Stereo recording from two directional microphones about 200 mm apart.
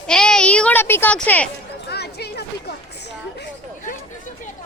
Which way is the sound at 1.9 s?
55° left (ahead or behind).